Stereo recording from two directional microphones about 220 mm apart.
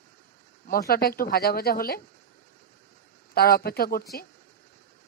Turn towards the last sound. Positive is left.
turn(degrees=40)  # may be behind; listen again after turning